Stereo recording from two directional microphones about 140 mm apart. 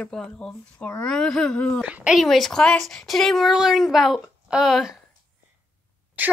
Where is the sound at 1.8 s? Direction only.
10° right (ahead or behind).